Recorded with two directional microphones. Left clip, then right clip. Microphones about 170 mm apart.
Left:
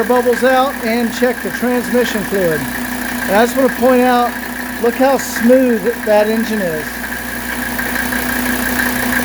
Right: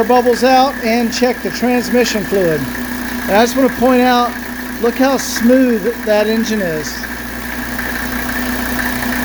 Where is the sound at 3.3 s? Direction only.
15° right (ahead or behind).